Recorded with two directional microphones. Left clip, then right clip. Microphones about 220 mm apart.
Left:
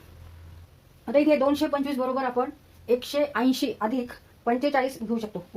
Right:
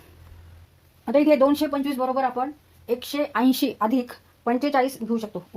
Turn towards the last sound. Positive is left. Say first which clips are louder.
# right 3 dB
turn(degrees=-50)  # may be behind; listen again after turning